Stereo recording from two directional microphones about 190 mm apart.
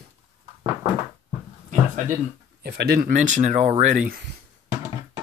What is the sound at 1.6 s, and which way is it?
Speech, 40° right (ahead or behind).